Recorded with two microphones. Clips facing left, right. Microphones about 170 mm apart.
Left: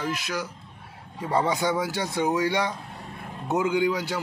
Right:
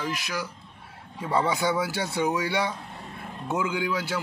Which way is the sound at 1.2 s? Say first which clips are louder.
Left 1 dB; 15° left (ahead or behind).